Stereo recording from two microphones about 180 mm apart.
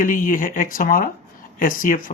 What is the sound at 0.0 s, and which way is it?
Speech, 50° left (ahead or behind).